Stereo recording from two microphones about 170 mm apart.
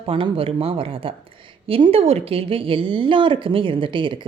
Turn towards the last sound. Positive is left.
turn(degrees=-30)  # may be behind; listen again after turning